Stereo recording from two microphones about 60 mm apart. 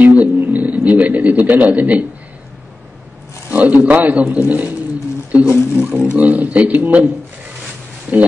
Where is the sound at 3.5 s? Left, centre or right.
Right.